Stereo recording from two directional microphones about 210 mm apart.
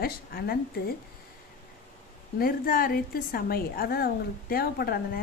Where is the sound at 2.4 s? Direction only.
45° left (ahead or behind).